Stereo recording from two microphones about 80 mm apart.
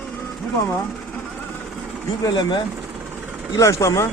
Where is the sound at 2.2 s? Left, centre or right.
Left.